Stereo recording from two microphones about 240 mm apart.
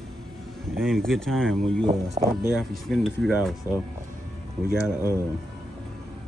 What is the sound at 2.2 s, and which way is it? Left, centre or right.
Speech, right.